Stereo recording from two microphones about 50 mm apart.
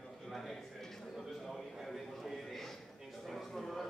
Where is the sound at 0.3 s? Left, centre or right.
Centre.